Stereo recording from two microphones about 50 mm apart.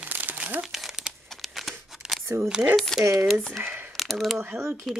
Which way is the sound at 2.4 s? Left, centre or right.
Centre.